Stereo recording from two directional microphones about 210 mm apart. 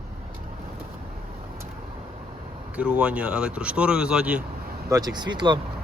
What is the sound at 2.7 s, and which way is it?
Speech, 5° right (ahead or behind).